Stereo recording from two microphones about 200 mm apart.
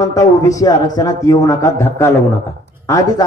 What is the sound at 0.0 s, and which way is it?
A man's voice, 15° left (ahead or behind).